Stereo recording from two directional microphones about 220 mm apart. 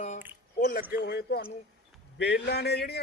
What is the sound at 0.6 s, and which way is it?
A woman's voice, 40° left (ahead or behind).